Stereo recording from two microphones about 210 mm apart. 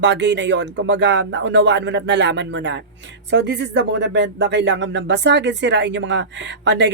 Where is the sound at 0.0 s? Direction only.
55° right (ahead or behind).